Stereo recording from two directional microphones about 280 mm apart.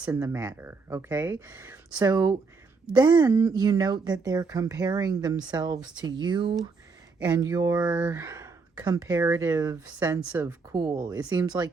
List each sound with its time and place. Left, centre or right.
0.0 s speech: centre